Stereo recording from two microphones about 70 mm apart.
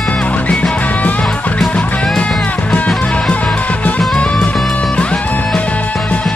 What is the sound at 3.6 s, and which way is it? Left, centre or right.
Music, left.